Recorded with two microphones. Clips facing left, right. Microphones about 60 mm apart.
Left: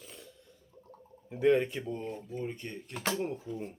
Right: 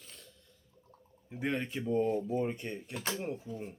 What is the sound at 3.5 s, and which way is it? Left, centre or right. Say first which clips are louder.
Speech: left 3 dB; left.